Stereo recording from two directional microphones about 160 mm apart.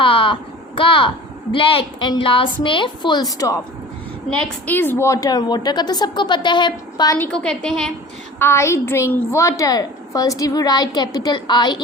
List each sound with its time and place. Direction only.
0.0 s a sound: 30° left (ahead or behind)
0.8 s a woman's voice: 30° left (ahead or behind)
7.2 s a woman's voice: 5° left (ahead or behind)
8.4 s a woman's voice: 15° left (ahead or behind)